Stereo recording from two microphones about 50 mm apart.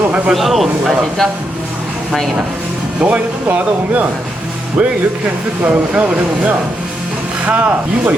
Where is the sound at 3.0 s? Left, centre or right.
Right.